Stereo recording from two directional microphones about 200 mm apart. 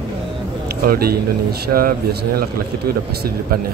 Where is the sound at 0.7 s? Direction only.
50° right (ahead or behind).